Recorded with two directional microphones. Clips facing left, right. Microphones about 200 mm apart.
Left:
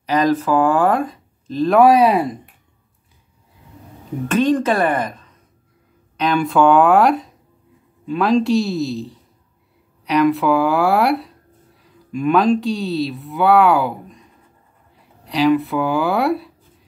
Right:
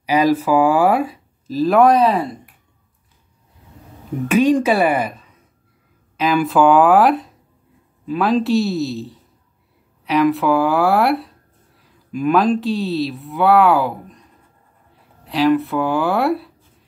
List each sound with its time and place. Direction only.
0.0 s speech: 10° right (ahead or behind); by 2.3 s 15° left (ahead or behind)
4.3 s speech: 10° right (ahead or behind)